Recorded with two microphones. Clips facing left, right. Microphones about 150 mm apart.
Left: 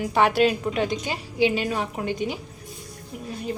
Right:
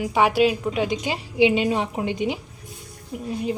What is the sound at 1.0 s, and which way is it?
A woman's voice, 25° right (ahead or behind).